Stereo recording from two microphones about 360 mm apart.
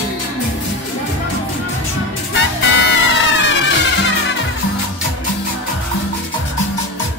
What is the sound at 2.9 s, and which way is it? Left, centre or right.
Music, left.